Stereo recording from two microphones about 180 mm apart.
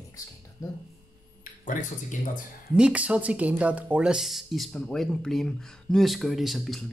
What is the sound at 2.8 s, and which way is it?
Speech, 5° right (ahead or behind).